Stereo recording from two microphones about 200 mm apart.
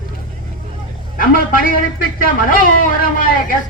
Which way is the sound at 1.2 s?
45° left (ahead or behind).